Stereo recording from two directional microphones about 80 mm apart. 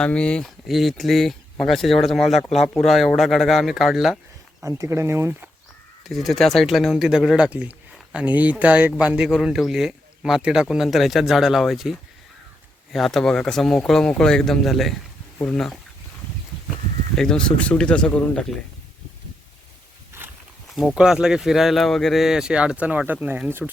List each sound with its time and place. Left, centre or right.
0.0 s speech: centre
0.7 s speech: centre
4.8 s speech: right
6.1 s speech: centre
17.2 s speech: centre
20.9 s speech: centre; by 23.7 s right